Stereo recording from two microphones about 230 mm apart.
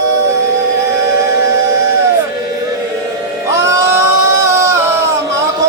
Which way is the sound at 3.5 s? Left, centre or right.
Centre.